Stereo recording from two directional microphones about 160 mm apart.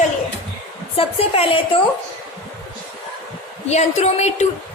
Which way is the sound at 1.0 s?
35° left (ahead or behind).